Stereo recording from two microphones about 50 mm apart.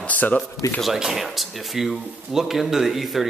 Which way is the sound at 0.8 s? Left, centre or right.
Centre.